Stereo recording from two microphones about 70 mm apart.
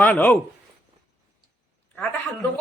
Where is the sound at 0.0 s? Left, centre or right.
Left.